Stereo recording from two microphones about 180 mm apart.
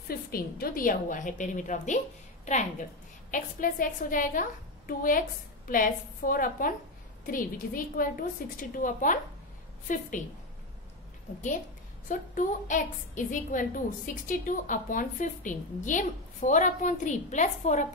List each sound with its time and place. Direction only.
0.3 s a woman's voice: 55° left (ahead or behind)
3.3 s a woman's voice: 45° left (ahead or behind)
12.1 s a woman's voice: 45° left (ahead or behind)